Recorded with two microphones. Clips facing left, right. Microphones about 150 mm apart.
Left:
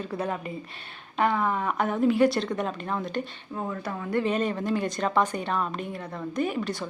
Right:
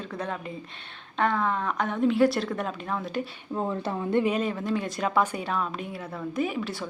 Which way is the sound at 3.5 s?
25° right (ahead or behind).